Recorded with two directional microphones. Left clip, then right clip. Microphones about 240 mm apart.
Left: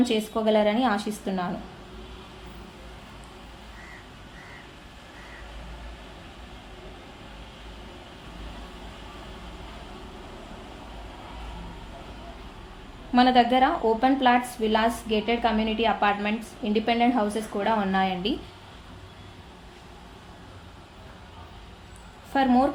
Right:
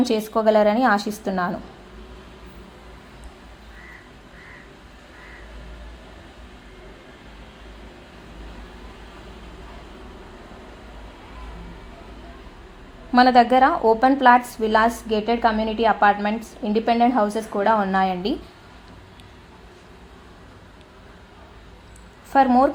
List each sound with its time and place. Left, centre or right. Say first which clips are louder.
0.0 s a woman's voice: right 5 dB; right
13.1 s a woman's voice: right 5 dB; right
22.3 s speech: right 6 dB; centre